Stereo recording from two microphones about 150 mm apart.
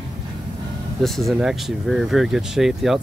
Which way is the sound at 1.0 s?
Centre (ahead or behind).